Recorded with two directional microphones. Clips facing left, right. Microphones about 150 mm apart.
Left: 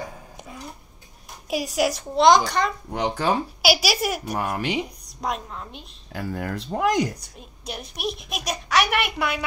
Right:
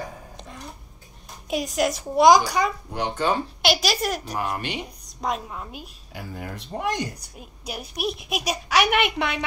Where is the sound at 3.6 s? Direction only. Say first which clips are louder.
Left 1 dB; 5° left (ahead or behind).